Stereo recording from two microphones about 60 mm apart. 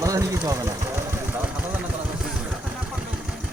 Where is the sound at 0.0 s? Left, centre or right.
Right.